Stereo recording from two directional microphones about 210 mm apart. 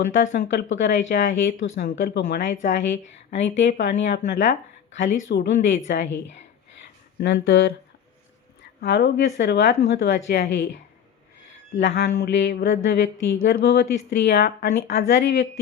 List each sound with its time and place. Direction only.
0.1 s speech: 60° left (ahead or behind)
4.0 s speech: 35° left (ahead or behind)
4.4 s speech: 60° left (ahead or behind)
7.2 s a woman's voice: 55° left (ahead or behind)
8.8 s speech: 50° left (ahead or behind)
11.8 s a woman's voice: 50° left (ahead or behind)
12.2 s a woman's voice: 60° left (ahead or behind)